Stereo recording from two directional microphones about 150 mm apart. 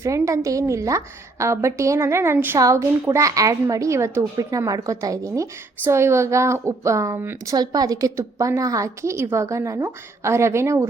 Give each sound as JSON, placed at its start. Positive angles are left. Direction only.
{"t": 0.0, "sound": "a woman's voice", "side_deg": -20}